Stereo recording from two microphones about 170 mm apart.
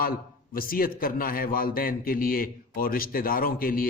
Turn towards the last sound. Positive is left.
turn(degrees=60)  # may be behind; listen again after turning